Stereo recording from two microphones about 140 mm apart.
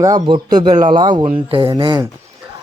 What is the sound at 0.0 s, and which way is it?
A man's voice, 30° right (ahead or behind).